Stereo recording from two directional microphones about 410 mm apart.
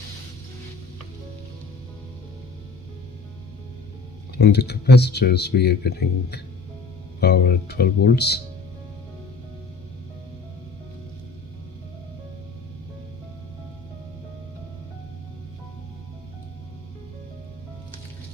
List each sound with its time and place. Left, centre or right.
4.4 s speech: left
7.2 s speech: left